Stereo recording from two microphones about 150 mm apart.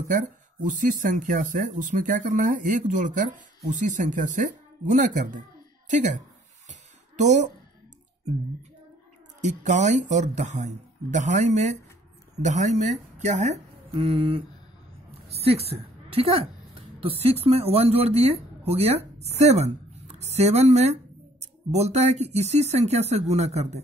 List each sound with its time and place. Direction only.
0.1 s speech: 60° right (ahead or behind)
6.7 s a sound: 55° right (ahead or behind)
9.4 s speech: 55° right (ahead or behind)